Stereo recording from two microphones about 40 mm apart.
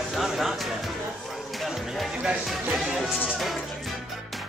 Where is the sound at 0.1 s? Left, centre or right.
Centre.